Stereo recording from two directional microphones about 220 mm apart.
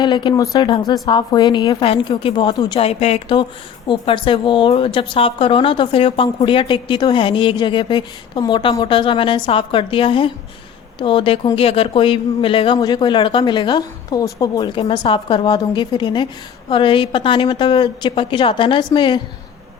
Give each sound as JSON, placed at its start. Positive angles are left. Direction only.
{"t": 0.0, "sound": "speech", "side_deg": 20}